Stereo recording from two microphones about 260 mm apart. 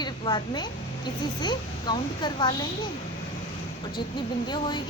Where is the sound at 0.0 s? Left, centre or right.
Centre.